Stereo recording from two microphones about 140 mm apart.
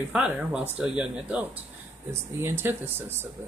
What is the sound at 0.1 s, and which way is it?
Speech, 10° right (ahead or behind).